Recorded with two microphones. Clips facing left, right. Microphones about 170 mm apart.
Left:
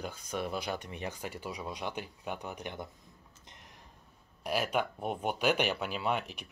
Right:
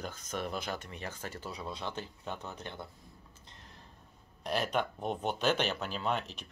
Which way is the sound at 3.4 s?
20° left (ahead or behind).